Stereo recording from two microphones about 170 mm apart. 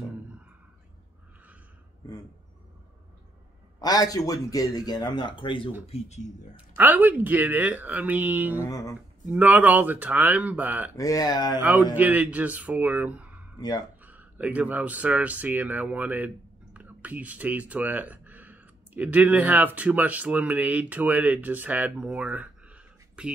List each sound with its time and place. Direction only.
3.8 s speech: 20° left (ahead or behind)
5.9 s speech: 40° left (ahead or behind)
6.5 s speech: 10° right (ahead or behind)
8.5 s speech: 20° left (ahead or behind)
9.3 s speech: 10° right (ahead or behind)
11.0 s speech: 20° left (ahead or behind)
11.9 s speech: 10° right (ahead or behind)
13.6 s speech: 25° left (ahead or behind)
14.0 s speech: 10° right (ahead or behind)